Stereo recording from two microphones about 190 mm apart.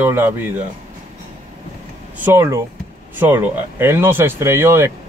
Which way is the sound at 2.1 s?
10° right (ahead or behind).